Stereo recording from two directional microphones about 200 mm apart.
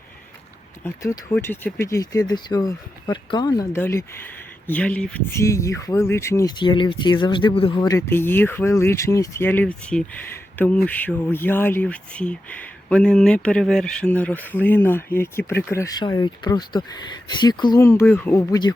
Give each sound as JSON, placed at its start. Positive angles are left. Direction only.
{"t": 0.9, "sound": "speech", "side_deg": 15}